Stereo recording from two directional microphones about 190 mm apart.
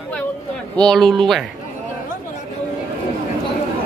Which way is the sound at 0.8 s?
Centre (ahead or behind).